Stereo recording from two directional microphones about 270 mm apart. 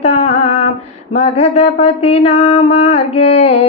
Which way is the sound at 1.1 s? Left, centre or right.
Left.